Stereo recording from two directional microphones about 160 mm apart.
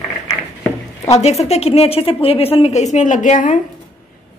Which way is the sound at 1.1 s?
40° left (ahead or behind).